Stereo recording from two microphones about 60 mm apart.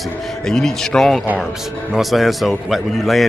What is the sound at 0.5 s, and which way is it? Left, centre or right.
A man's voice, centre.